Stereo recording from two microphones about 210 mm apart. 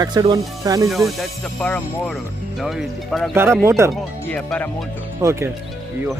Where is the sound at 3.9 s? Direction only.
5° left (ahead or behind).